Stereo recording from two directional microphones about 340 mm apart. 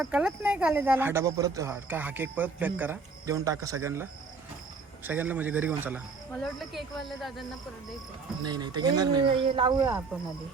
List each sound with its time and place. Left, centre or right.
0.0 s speech: centre
8.4 s speech: centre